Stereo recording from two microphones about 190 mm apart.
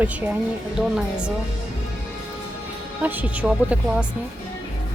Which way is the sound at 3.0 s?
10° right (ahead or behind).